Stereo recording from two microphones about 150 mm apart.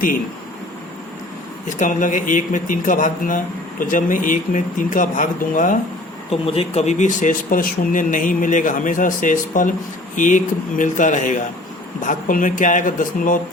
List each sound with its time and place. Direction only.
1.6 s speech: 60° left (ahead or behind)
6.3 s speech: 40° left (ahead or behind); by 13.4 s 60° left (ahead or behind)